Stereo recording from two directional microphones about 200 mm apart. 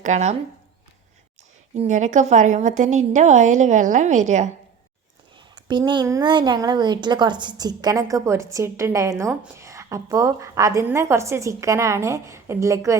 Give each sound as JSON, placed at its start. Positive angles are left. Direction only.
{"t": 0.0, "sound": "a woman's voice", "side_deg": -35}
{"t": 1.7, "sound": "a woman's voice", "side_deg": -35}
{"t": 5.6, "sound": "a woman's voice", "side_deg": -20}